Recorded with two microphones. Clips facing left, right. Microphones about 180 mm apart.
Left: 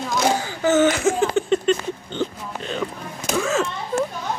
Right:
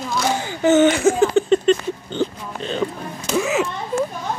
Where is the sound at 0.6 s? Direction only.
25° right (ahead or behind).